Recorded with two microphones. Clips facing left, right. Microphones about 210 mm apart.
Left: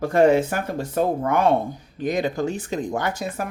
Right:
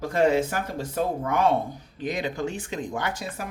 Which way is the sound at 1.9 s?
45° left (ahead or behind).